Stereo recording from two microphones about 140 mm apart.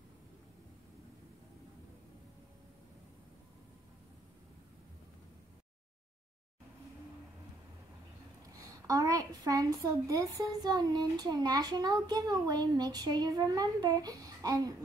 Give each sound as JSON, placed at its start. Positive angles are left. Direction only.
{"t": 8.8, "sound": "a child's voice", "side_deg": -25}